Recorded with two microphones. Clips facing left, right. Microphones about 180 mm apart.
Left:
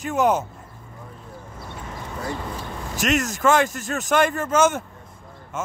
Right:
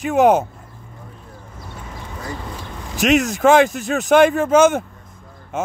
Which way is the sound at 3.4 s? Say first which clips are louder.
Right 6 dB; 90° right.